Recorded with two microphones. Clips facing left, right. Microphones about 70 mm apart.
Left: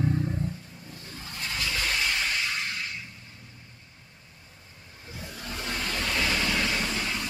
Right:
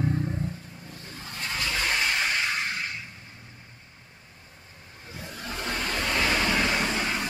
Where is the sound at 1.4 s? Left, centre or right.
Right.